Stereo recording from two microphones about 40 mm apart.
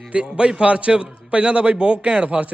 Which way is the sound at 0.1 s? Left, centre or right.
Right.